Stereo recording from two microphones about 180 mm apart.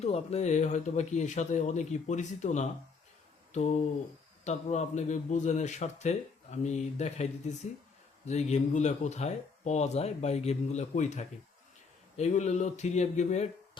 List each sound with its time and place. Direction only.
0.0 s speech: 35° left (ahead or behind)